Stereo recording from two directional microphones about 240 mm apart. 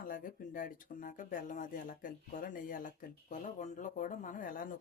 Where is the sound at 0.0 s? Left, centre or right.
Left.